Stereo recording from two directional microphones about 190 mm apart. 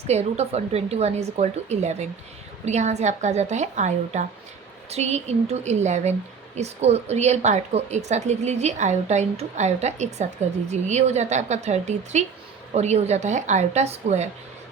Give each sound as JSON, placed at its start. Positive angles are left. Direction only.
{"t": 0.1, "sound": "a woman's voice", "side_deg": -35}